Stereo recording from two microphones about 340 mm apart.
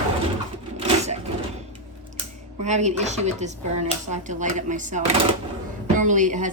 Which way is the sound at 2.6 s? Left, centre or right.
Centre.